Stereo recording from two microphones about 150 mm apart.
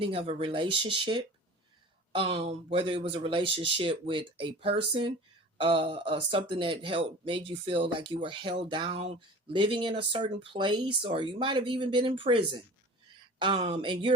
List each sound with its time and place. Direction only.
0.0 s speech: 35° right (ahead or behind)
13.8 s speech: 30° right (ahead or behind)